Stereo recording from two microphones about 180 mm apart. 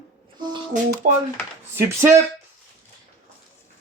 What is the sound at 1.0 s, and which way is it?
Speech, 45° right (ahead or behind).